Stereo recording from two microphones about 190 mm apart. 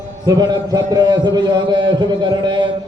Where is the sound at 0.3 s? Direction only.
20° right (ahead or behind).